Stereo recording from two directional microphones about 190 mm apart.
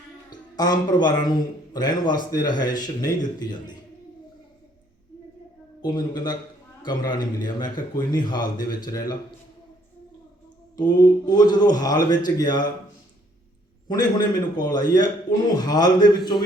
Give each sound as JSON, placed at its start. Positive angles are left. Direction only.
{"t": 0.3, "sound": "a man's voice", "side_deg": 20}
{"t": 5.8, "sound": "a man's voice", "side_deg": 20}
{"t": 10.8, "sound": "a man's voice", "side_deg": 20}
{"t": 13.8, "sound": "a man's voice", "side_deg": 20}